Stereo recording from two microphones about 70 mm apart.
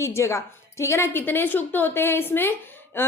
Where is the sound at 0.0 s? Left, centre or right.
Left.